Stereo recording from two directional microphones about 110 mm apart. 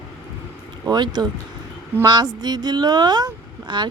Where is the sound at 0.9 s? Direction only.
40° right (ahead or behind).